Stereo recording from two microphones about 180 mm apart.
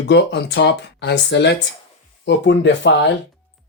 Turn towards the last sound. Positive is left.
turn(degrees=70)  # may be behind; listen again after turning